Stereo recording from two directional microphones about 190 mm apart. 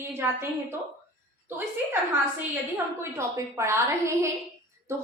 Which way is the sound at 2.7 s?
15° right (ahead or behind).